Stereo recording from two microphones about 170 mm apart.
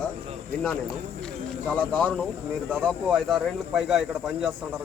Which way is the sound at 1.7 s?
10° left (ahead or behind).